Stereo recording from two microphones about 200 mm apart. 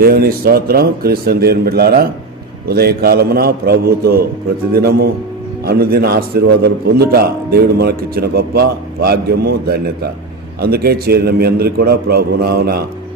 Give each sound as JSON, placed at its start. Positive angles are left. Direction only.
{"t": 0.0, "sound": "a man's voice", "side_deg": -50}